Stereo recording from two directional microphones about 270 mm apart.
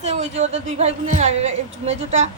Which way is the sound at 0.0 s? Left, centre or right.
Right.